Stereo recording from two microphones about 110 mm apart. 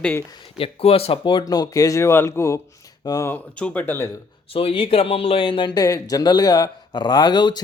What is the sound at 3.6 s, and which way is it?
Speech, 15° left (ahead or behind).